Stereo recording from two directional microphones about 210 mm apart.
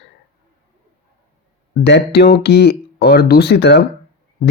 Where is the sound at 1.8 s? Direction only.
50° left (ahead or behind).